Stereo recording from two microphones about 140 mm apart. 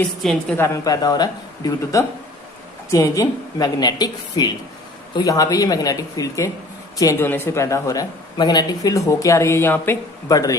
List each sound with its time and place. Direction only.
0.0 s a woman's voice: 5° left (ahead or behind)
0.5 s speech: 20° left (ahead or behind)